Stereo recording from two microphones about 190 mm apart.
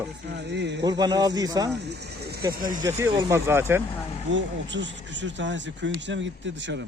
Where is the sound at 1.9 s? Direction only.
60° right (ahead or behind).